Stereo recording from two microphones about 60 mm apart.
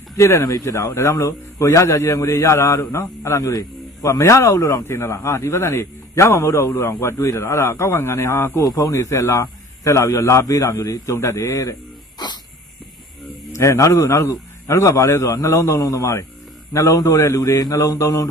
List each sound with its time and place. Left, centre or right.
0.2 s a man's voice: left
0.9 s a man's voice: left
2.8 s a man's voice: left
3.3 s a man's voice: left
4.8 s a man's voice: left
7.2 s a man's voice: left
8.6 s a man's voice: left
10.5 s a man's voice: left
11.1 s a man's voice: left
13.5 s a man's voice: left
16.0 s a man's voice: left
16.7 s a man's voice: left